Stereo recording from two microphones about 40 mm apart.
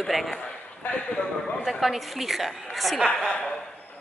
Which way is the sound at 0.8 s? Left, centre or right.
Left.